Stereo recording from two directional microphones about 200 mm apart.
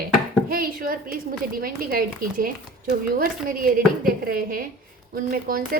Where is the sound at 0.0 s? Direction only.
45° right (ahead or behind).